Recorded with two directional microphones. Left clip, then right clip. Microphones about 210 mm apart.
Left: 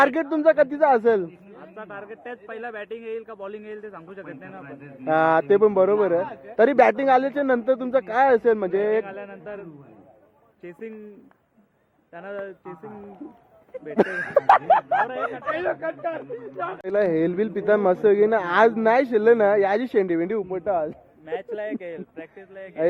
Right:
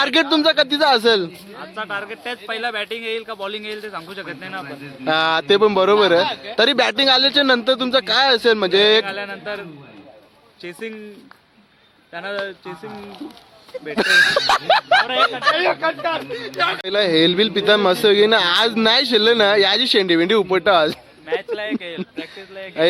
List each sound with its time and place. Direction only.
0.0 s speech: 10° right (ahead or behind)
6.6 s speech: 5° right (ahead or behind)
10.6 s speech: 5° right (ahead or behind)
12.1 s speech: centre (ahead or behind)
13.8 s speech: 5° right (ahead or behind)
14.4 s snicker: 25° right (ahead or behind)
16.3 s speech: 35° right (ahead or behind)
16.8 s speech: 10° right (ahead or behind)
20.4 s snicker: 30° right (ahead or behind)
21.2 s speech: 45° left (ahead or behind)
22.1 s speech: 10° left (ahead or behind)